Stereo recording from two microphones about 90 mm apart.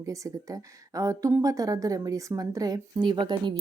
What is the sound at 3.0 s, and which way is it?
Speech, 60° right (ahead or behind).